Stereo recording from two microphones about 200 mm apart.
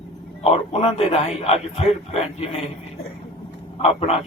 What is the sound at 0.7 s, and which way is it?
Speech, 30° left (ahead or behind).